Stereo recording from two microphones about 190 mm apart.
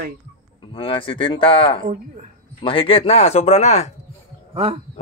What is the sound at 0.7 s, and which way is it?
Speech, 25° left (ahead or behind).